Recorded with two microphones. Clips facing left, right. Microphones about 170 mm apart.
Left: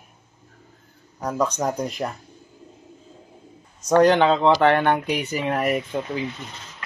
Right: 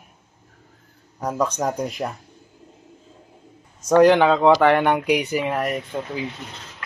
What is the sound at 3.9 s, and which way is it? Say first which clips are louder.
Speech: right 2 dB; 10° right (ahead or behind).